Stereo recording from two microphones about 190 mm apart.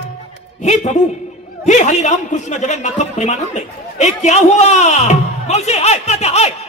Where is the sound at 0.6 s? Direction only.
40° left (ahead or behind).